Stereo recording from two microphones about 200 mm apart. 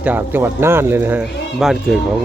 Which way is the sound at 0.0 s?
10° right (ahead or behind).